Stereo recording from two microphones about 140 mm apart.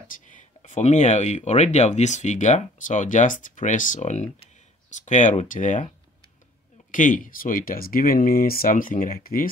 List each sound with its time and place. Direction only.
0.3 s speech: 60° left (ahead or behind)
6.9 s speech: 70° left (ahead or behind); by 9.5 s 90° left